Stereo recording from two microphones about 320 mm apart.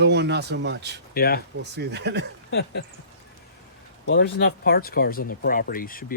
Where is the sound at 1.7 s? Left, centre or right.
Right.